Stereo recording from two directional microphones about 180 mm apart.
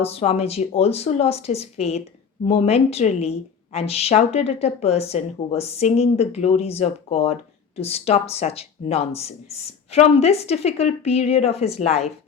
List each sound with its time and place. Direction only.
0.0 s speech: 35° left (ahead or behind)